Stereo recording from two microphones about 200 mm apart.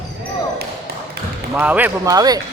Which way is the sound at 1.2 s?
50° right (ahead or behind).